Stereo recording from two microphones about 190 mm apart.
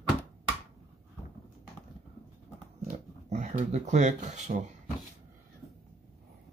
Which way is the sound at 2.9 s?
35° right (ahead or behind).